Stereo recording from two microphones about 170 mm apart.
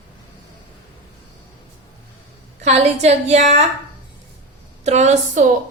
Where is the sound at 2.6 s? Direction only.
40° right (ahead or behind).